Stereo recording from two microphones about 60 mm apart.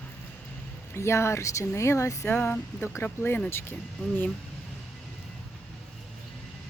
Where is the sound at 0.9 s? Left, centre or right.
Left.